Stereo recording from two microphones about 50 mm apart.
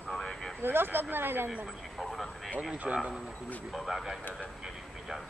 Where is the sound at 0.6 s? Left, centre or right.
Right.